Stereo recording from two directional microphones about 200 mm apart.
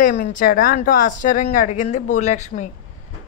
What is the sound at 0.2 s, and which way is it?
A woman's voice, 40° left (ahead or behind).